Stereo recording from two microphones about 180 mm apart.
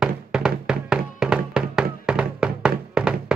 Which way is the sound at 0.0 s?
5° right (ahead or behind).